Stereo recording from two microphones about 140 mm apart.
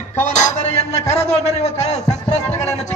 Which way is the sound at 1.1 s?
50° left (ahead or behind).